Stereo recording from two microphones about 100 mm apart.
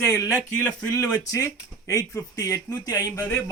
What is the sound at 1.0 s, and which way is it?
Speech, 35° left (ahead or behind).